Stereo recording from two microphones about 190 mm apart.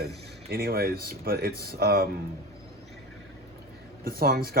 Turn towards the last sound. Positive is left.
turn(degrees=-55)  # may be behind; listen again after turning